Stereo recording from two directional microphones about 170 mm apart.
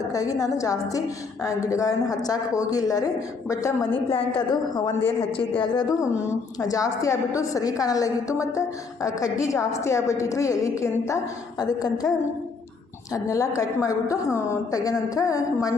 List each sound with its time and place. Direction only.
0.1 s a woman's voice: 20° left (ahead or behind)
5.0 s a woman's voice: 30° left (ahead or behind)
6.1 s a woman's voice: 15° left (ahead or behind)
13.1 s a woman's voice: 20° left (ahead or behind)